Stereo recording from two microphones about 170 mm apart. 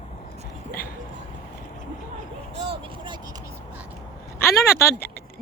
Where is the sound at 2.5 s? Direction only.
35° right (ahead or behind).